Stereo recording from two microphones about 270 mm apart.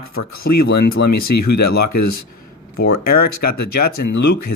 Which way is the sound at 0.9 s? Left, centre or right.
Left.